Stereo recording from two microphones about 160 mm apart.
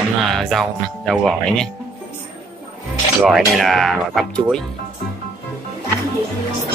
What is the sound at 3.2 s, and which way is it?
Speech, centre (ahead or behind).